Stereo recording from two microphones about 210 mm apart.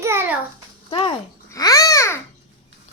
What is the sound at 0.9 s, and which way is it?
Babbling, 20° left (ahead or behind).